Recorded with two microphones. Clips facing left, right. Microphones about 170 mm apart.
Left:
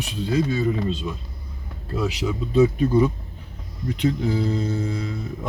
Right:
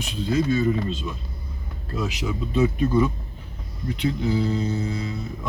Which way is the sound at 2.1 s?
40° left (ahead or behind).